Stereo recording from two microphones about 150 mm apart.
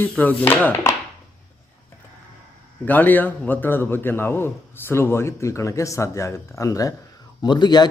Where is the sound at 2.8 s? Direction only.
10° left (ahead or behind).